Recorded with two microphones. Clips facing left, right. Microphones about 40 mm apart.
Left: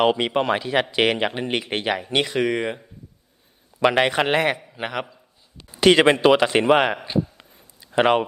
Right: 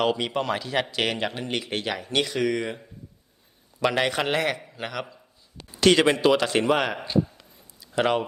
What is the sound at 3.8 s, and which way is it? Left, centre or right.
Speech, left.